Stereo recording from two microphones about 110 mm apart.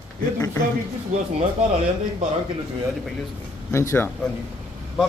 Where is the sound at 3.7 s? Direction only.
25° left (ahead or behind).